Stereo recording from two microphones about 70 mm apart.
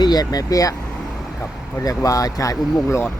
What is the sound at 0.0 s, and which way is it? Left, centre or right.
Speech, left.